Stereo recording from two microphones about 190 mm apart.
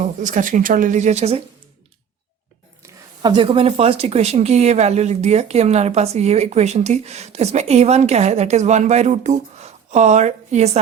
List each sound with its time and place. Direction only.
0.0 s speech: 40° right (ahead or behind)
2.8 s speech: 25° right (ahead or behind)